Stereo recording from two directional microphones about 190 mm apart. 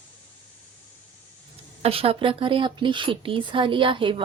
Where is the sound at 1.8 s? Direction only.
30° right (ahead or behind).